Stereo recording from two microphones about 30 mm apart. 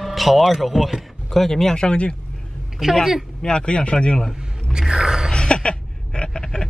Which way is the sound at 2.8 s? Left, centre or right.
Centre.